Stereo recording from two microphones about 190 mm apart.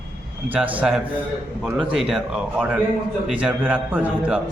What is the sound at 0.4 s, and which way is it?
A man's voice, 10° right (ahead or behind).